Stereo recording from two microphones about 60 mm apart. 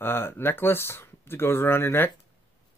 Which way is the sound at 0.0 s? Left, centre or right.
Left.